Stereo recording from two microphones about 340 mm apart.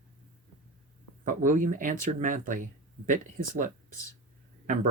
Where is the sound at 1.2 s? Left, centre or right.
Right.